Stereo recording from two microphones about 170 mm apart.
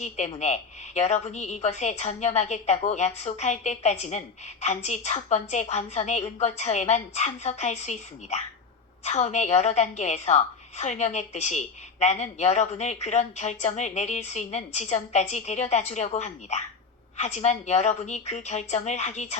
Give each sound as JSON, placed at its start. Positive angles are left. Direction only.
{"t": 0.0, "sound": "a woman's voice", "side_deg": 40}